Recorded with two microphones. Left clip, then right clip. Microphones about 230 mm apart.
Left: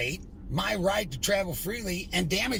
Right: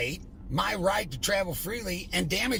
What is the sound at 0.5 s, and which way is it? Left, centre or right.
Speech, right.